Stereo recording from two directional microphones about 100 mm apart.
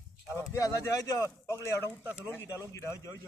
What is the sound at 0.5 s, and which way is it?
Speech, 30° left (ahead or behind).